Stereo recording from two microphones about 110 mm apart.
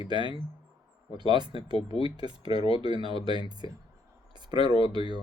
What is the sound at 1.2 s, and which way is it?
Speech, 45° right (ahead or behind).